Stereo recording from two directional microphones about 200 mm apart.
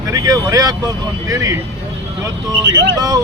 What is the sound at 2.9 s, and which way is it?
Speech, 20° right (ahead or behind).